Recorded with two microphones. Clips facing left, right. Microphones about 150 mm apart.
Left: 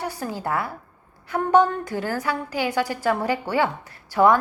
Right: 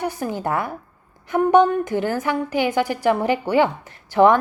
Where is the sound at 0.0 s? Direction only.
15° right (ahead or behind).